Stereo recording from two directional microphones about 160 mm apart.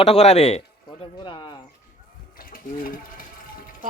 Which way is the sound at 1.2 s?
30° left (ahead or behind).